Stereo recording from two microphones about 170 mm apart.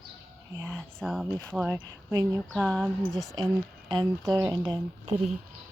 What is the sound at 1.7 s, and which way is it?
Speech, 15° right (ahead or behind).